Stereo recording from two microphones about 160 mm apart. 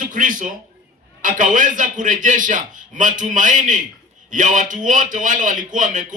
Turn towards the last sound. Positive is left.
turn(degrees=-55)  # may be behind; listen again after turning